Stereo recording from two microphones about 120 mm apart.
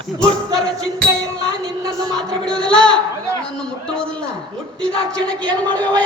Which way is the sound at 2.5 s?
5° left (ahead or behind).